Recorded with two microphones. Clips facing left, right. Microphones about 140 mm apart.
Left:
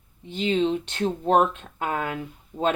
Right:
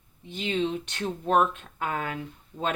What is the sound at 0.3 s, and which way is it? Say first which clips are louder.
Speech: left 5 dB; 35° left (ahead or behind).